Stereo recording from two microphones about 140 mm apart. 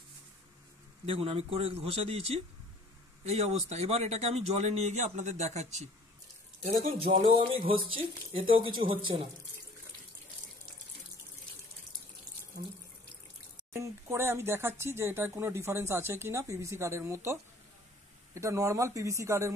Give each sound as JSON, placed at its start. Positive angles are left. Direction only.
{"t": 1.0, "sound": "a man's voice", "side_deg": -45}
{"t": 7.2, "sound": "a man's voice", "side_deg": -40}
{"t": 13.7, "sound": "speech", "side_deg": -20}